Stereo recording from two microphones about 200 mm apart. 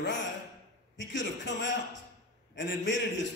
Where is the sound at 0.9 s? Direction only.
65° left (ahead or behind).